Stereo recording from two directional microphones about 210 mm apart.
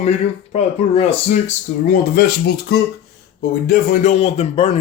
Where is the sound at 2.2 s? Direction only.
50° left (ahead or behind); by 4.7 s 30° left (ahead or behind).